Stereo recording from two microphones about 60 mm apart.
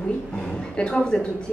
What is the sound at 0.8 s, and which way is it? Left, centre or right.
Speech, centre.